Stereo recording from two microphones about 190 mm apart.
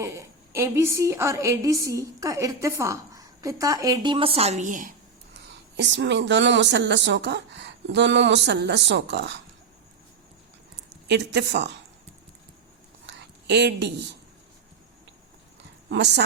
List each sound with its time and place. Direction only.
0.0 s a woman's voice: 15° right (ahead or behind); by 4.9 s 45° right (ahead or behind)
5.3 s speech: 65° right (ahead or behind)
11.1 s speech: 60° right (ahead or behind)
13.1 s a sound: 65° right (ahead or behind)
15.9 s speech: 65° right (ahead or behind)